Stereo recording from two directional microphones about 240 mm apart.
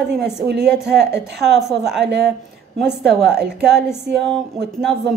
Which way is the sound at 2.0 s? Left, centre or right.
Right.